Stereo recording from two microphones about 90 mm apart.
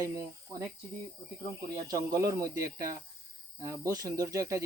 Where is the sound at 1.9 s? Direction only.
40° right (ahead or behind).